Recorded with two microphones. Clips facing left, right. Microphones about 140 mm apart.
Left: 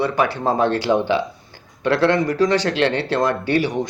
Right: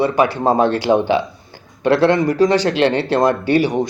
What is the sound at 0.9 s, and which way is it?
Speech, 40° right (ahead or behind).